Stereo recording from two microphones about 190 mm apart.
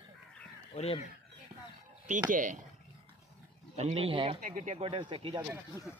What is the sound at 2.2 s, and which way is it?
Speech, 45° right (ahead or behind).